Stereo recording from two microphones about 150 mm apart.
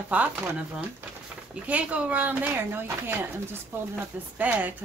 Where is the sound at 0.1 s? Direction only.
10° right (ahead or behind).